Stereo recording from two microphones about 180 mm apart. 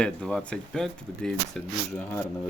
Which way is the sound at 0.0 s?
5° left (ahead or behind).